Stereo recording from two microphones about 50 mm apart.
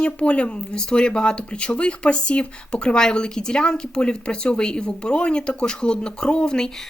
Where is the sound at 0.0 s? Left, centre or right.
Left.